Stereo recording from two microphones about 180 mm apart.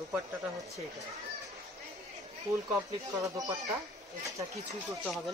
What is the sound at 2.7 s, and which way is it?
Speech, 20° right (ahead or behind).